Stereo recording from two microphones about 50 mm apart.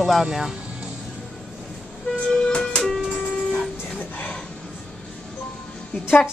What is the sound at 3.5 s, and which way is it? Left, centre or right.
Train, left.